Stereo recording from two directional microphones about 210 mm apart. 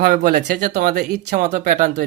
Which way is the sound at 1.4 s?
35° right (ahead or behind).